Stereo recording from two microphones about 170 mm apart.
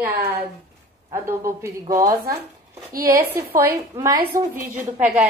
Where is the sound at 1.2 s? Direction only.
15° right (ahead or behind).